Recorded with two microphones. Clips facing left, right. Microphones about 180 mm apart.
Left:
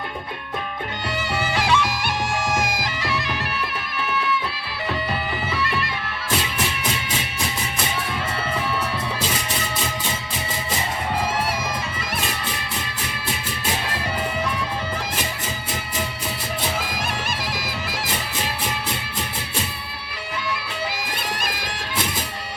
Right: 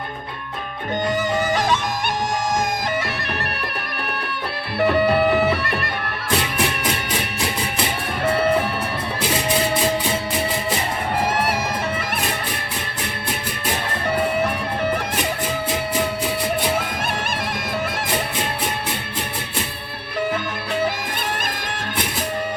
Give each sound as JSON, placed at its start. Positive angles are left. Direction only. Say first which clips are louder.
{"t": 1.5, "sound": "music", "louder": "even", "side_deg": -45}
{"t": 2.8, "sound": "bagpipes", "louder": "right 2 dB", "side_deg": -60}
{"t": 4.1, "sound": "music", "louder": "left 5 dB", "side_deg": -60}
{"t": 14.4, "sound": "music", "louder": "right 4 dB", "side_deg": -60}